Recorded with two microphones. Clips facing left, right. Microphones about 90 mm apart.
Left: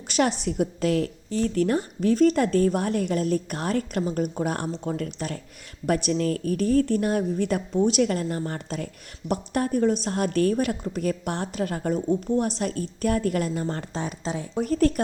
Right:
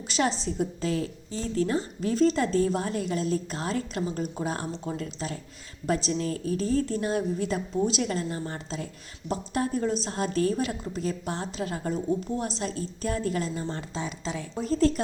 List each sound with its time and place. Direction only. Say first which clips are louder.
0.1 s a woman's voice: left 4 dB; 55° left (ahead or behind)
14.6 s a woman's voice: left 2 dB; 55° left (ahead or behind)